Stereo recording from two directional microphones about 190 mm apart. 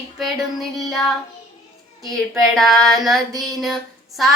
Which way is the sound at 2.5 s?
Centre (ahead or behind).